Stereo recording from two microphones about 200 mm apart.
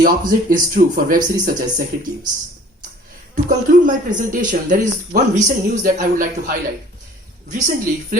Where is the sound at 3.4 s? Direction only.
40° right (ahead or behind).